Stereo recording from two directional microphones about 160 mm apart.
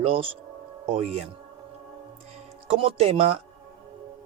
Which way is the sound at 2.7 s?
40° right (ahead or behind).